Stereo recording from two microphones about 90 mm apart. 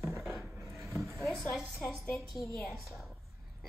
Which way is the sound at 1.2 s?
Centre (ahead or behind).